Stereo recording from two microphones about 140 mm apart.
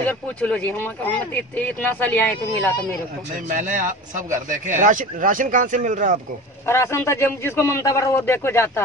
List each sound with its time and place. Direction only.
0.0 s speech: 10° left (ahead or behind)
3.4 s a man's voice: 70° right (ahead or behind)
6.6 s a man's voice: 20° left (ahead or behind)